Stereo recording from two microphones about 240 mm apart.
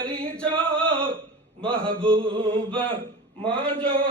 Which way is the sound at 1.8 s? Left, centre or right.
Centre.